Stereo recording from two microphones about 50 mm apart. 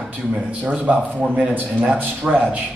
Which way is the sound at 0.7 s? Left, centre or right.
Right.